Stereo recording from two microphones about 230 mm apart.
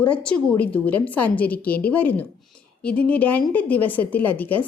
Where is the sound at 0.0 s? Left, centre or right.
Centre.